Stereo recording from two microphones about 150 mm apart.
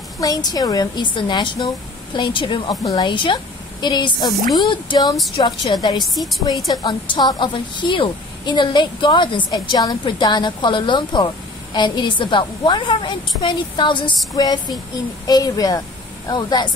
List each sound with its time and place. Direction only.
0.2 s a woman's voice: 25° left (ahead or behind)
2.7 s a woman's voice: 25° left (ahead or behind)
6.1 s a woman's voice: centre (ahead or behind)
6.7 s a woman's voice: 25° left (ahead or behind)